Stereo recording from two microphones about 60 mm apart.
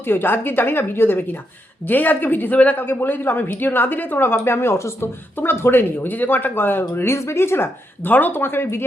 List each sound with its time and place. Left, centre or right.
0.0 s a woman's voice: left
2.8 s a woman's voice: left
5.4 s a woman's voice: left